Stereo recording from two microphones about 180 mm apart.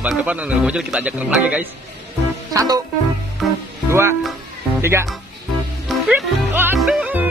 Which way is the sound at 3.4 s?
Centre (ahead or behind).